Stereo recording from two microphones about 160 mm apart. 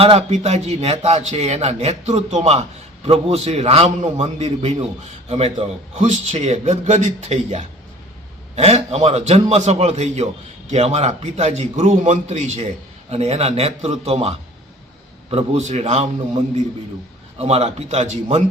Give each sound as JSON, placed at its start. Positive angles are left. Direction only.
{"t": 0.0, "sound": "a man's voice", "side_deg": -40}
{"t": 17.3, "sound": "a man's voice", "side_deg": -40}